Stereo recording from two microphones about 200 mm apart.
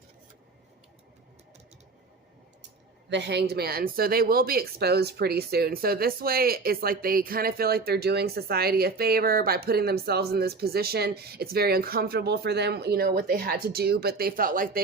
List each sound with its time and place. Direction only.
3.1 s speech: 60° right (ahead or behind)